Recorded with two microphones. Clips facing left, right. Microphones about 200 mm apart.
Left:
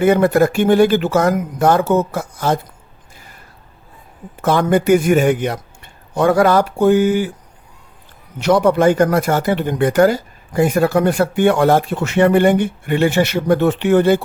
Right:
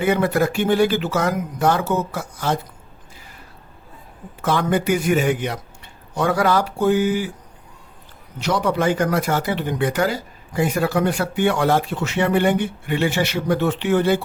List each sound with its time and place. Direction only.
0.0 s speech: 45° left (ahead or behind)
4.4 s a man's voice: 50° left (ahead or behind)
8.4 s speech: 55° left (ahead or behind)